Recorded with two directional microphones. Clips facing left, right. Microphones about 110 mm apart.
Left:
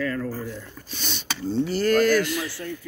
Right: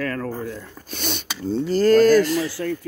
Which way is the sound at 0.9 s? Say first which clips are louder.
Right 7 dB; 60° right (ahead or behind).